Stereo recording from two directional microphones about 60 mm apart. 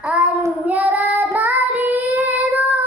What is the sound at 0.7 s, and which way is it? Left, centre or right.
Child singing, right.